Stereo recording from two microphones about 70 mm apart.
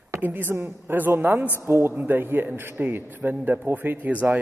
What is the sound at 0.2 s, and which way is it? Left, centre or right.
A man's voice, right.